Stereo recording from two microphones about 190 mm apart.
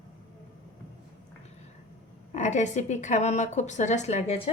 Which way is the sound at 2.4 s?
40° left (ahead or behind).